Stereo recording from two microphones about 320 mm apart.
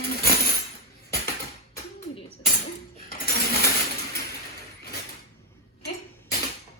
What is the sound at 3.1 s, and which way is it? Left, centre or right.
Coin, left.